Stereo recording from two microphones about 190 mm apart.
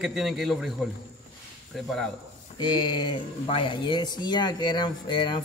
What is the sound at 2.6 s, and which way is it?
A man's voice, 25° left (ahead or behind).